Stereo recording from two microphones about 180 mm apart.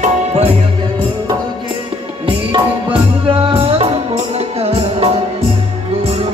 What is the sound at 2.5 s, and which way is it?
Music, 25° right (ahead or behind).